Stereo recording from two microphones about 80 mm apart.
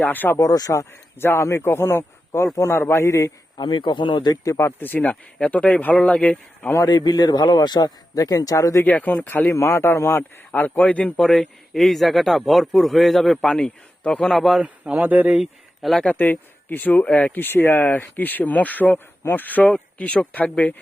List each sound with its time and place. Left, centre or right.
0.0 s speech: left
0.3 s speech: left
3.6 s speech: left
4.4 s speech: left
4.8 s a man's voice: left
6.7 s a man's voice: left
8.8 s a man's voice: left; by 14.6 s centre
14.6 s a man's voice: centre
15.0 s speech: right
15.3 s speech: centre
16.0 s a man's voice: left